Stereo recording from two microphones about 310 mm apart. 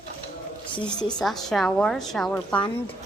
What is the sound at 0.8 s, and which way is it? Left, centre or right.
A woman's voice, centre.